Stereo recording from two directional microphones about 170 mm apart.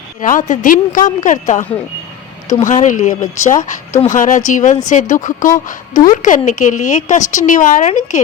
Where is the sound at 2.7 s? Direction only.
50° left (ahead or behind).